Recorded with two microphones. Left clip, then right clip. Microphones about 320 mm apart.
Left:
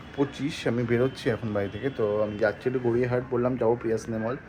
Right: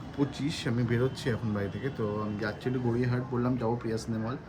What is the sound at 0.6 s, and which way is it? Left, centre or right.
A man's voice, centre.